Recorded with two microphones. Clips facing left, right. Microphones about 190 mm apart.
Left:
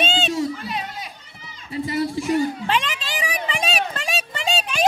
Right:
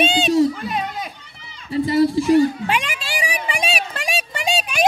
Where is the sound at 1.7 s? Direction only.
30° right (ahead or behind).